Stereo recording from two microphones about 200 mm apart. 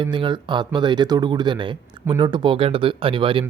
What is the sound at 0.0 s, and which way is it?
Speech, 25° right (ahead or behind).